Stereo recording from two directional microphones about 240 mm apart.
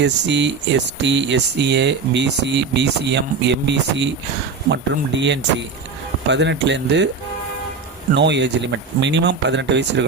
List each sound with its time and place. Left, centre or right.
0.0 s speech: right
8.1 s speech: right